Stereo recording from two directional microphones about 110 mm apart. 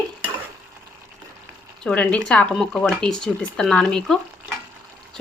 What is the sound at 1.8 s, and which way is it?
Speech, 10° left (ahead or behind).